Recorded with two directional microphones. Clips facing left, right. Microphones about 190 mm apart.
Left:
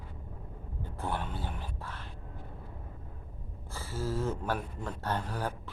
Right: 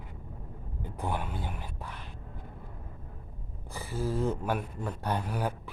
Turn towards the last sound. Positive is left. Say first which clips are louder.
# right 2 dB
turn(degrees=-10)  # may be behind; listen again after turning